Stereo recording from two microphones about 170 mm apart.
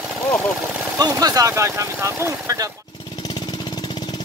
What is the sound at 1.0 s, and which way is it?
Speech, 20° right (ahead or behind).